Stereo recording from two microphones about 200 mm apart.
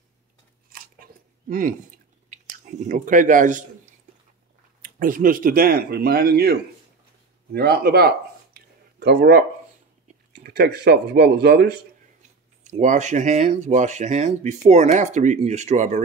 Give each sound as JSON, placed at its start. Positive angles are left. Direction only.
{"t": 1.5, "sound": "speech", "side_deg": -40}
{"t": 4.8, "sound": "speech", "side_deg": -45}
{"t": 8.5, "sound": "a sound", "side_deg": -50}
{"t": 10.3, "sound": "speech", "side_deg": -55}
{"t": 12.6, "sound": "speech", "side_deg": -40}